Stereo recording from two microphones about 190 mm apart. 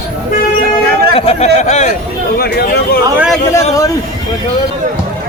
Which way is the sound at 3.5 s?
15° left (ahead or behind).